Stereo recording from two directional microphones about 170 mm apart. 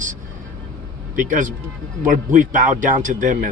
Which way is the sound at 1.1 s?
50° right (ahead or behind).